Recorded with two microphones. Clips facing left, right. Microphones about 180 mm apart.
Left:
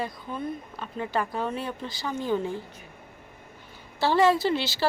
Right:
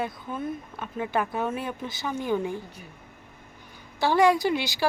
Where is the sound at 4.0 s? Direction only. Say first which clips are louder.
Right 1 dB; 15° right (ahead or behind).